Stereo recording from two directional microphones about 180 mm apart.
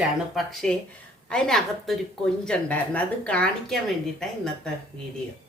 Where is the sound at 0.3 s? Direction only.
5° left (ahead or behind).